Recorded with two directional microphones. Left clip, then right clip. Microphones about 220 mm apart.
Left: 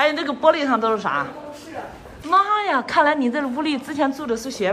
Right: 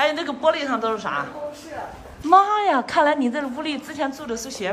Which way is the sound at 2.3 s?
10° right (ahead or behind).